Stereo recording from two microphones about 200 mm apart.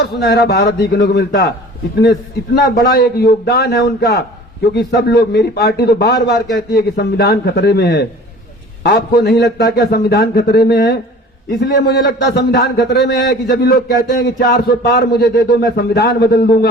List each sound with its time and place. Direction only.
0.0 s a man's voice: 55° left (ahead or behind)
2.7 s a man's voice: 50° left (ahead or behind)